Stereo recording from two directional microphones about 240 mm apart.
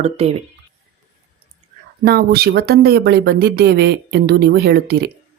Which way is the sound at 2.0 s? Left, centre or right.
Right.